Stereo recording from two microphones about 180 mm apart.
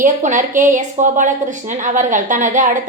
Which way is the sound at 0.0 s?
45° right (ahead or behind).